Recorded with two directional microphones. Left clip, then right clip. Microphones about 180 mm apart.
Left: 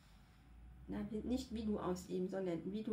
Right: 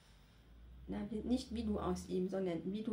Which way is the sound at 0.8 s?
15° right (ahead or behind).